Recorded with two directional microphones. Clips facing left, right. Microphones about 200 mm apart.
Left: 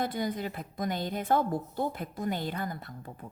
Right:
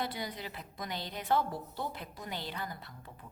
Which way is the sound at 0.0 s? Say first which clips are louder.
Left 7 dB; 50° left (ahead or behind).